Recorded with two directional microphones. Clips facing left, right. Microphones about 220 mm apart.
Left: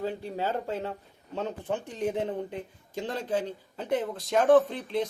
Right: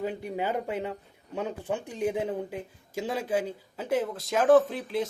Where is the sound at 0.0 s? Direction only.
15° right (ahead or behind).